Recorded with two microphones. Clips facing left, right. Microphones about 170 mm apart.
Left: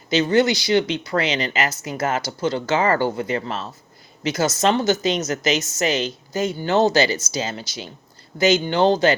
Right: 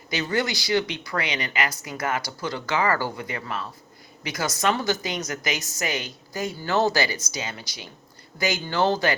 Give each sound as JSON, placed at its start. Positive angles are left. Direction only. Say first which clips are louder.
{"t": 0.1, "sound": "a woman's voice", "louder": "left 9 dB", "side_deg": 25}